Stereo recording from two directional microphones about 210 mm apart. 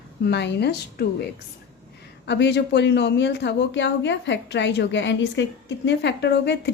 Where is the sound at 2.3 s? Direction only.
55° left (ahead or behind).